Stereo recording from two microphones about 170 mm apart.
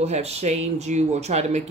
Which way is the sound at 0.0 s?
40° right (ahead or behind).